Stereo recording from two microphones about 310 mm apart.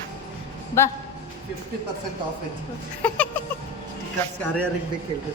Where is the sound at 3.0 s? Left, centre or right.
Centre.